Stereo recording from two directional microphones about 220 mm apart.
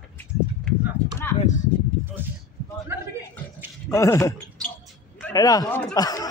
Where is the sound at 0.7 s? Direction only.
5° left (ahead or behind).